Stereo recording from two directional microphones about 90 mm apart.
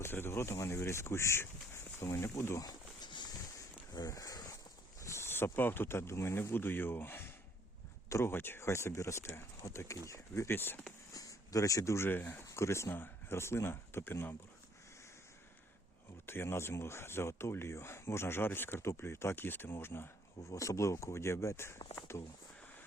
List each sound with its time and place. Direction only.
0.0 s speech: 25° left (ahead or behind)
2.6 s a sound: 55° left (ahead or behind)
3.9 s speech: 40° left (ahead or behind); by 10.8 s 25° left (ahead or behind)
11.1 s speech: 40° left (ahead or behind)
16.2 s speech: 25° left (ahead or behind)